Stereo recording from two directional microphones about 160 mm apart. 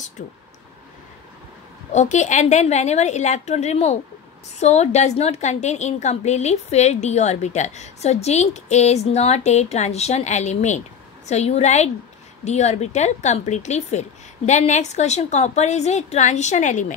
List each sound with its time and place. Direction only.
1.9 s a woman's voice: 45° left (ahead or behind)